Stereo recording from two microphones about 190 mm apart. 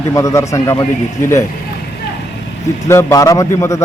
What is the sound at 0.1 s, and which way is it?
Speech, 15° left (ahead or behind).